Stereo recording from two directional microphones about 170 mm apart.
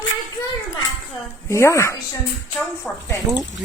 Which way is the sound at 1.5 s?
15° left (ahead or behind).